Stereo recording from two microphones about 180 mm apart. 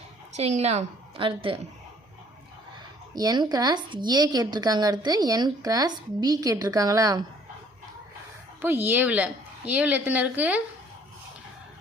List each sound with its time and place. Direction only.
0.3 s a woman's voice: 35° right (ahead or behind)
3.2 s a woman's voice: 20° right (ahead or behind)
8.6 s a woman's voice: 10° right (ahead or behind)